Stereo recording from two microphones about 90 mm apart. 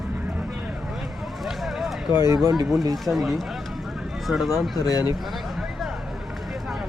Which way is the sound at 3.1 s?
Centre (ahead or behind).